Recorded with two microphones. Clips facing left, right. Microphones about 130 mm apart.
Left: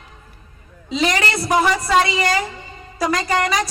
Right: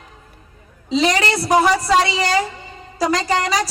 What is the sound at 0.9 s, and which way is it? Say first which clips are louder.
A woman's voice: right 3 dB; 30° right (ahead or behind).